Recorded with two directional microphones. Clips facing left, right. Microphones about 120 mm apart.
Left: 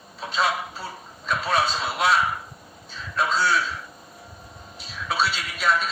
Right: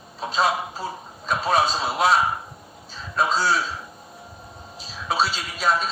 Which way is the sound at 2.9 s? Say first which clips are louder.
Right 2 dB; 35° right (ahead or behind).